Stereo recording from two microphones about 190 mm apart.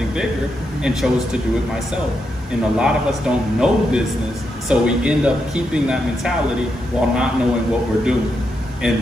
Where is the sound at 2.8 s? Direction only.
5° right (ahead or behind).